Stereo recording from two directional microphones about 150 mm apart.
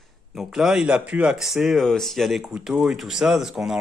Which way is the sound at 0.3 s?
Centre (ahead or behind).